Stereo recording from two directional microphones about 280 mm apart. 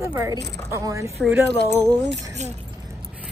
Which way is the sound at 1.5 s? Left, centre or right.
Right.